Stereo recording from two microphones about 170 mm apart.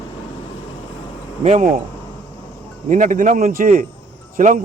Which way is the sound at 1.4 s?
40° right (ahead or behind).